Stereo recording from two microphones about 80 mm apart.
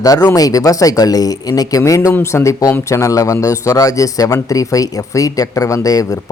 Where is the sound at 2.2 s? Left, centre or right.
Left.